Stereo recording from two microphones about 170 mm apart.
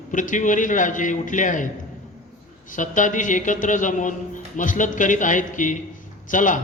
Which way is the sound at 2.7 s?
50° left (ahead or behind).